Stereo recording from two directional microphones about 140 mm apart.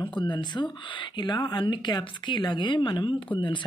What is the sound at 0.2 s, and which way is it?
A woman's voice, 35° left (ahead or behind).